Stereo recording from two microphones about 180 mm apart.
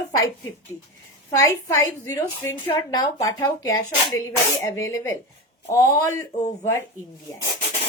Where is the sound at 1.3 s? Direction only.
15° left (ahead or behind).